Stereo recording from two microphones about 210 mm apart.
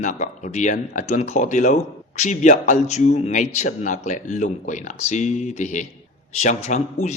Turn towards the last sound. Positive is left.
turn(degrees=35)  # may be behind; listen again after turning